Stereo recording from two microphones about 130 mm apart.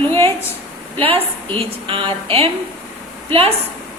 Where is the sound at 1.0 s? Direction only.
45° right (ahead or behind).